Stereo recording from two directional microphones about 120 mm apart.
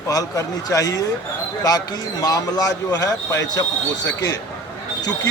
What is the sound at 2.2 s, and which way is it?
A man's voice, 30° left (ahead or behind).